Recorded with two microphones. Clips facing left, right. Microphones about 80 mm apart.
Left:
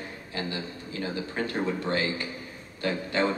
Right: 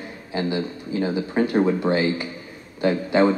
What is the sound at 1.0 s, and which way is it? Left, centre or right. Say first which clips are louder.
A man's voice: right 8 dB; centre.